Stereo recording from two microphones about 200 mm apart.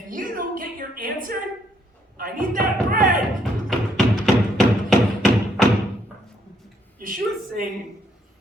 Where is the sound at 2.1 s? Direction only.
45° right (ahead or behind).